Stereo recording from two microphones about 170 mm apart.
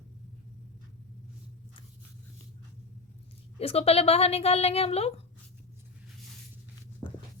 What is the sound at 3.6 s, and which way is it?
A woman's voice, 35° left (ahead or behind).